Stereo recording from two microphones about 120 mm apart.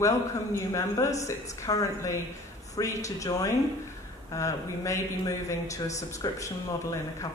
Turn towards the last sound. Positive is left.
turn(degrees=25)  # may be behind; listen again after turning